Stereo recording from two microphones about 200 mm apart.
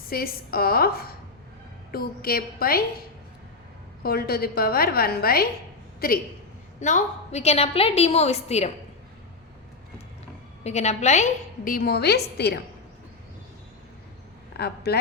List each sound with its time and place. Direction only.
0.1 s a woman's voice: 50° left (ahead or behind)
4.0 s a woman's voice: 50° left (ahead or behind)
6.7 s a woman's voice: 35° left (ahead or behind)
10.6 s a woman's voice: 35° left (ahead or behind); by 12.5 s 55° left (ahead or behind)
14.5 s a man's voice: 55° left (ahead or behind)